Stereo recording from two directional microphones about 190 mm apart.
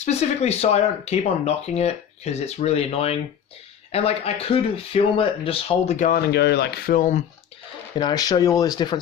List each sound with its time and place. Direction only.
0.0 s speech: 35° left (ahead or behind)
6.3 s speech: 60° left (ahead or behind)
7.9 s speech: 20° left (ahead or behind)